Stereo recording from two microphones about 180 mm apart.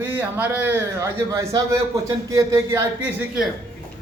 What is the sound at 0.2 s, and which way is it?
A man's voice, 10° right (ahead or behind).